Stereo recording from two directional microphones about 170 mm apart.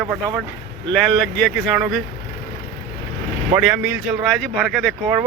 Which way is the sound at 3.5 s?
10° right (ahead or behind).